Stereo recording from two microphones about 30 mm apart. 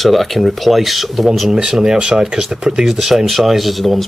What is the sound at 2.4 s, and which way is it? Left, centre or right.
Speech, centre.